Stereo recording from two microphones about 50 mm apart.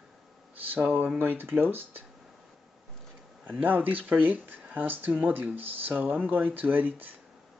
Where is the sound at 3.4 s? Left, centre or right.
Right.